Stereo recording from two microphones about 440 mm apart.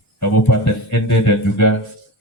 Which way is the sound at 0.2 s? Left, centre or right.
Left.